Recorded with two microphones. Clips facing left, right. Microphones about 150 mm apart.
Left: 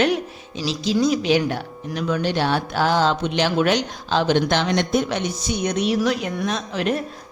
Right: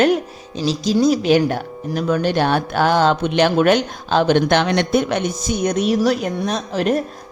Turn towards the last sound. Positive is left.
turn(degrees=-40)  # may be behind; listen again after turning